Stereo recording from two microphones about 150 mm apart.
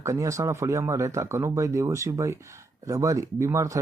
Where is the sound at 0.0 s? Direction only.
20° right (ahead or behind).